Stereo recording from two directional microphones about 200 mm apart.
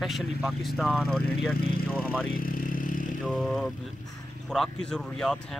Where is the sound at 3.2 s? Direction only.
Centre (ahead or behind).